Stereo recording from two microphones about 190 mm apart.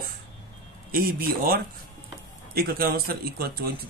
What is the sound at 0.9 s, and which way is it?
Speech, 50° right (ahead or behind).